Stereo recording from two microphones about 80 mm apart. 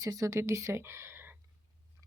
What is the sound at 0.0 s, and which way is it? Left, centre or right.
Speech, right.